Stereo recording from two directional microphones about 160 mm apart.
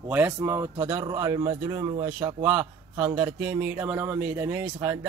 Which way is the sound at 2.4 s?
10° right (ahead or behind).